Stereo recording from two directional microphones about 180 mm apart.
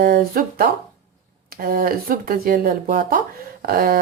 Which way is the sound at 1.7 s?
50° right (ahead or behind).